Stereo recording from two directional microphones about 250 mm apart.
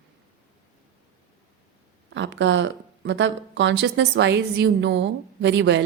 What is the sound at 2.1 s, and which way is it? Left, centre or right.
A woman's voice, right.